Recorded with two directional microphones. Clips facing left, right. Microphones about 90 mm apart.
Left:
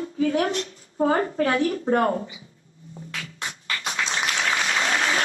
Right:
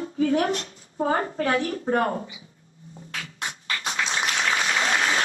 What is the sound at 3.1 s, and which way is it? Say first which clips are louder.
Music: right 1 dB; 35° right (ahead or behind).